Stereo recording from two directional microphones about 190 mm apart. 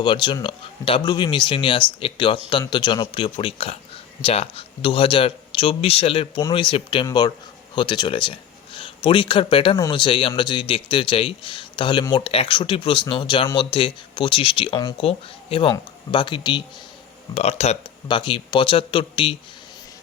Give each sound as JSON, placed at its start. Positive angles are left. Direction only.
{"t": 0.0, "sound": "speech", "side_deg": 25}